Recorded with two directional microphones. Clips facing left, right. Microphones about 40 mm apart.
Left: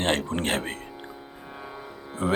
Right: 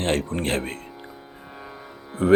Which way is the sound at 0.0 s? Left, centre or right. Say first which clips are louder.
Right 1 dB; left.